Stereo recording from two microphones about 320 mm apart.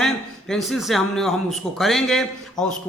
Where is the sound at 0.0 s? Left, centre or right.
Centre.